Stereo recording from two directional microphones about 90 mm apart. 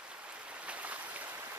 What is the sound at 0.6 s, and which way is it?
Boat, 15° right (ahead or behind).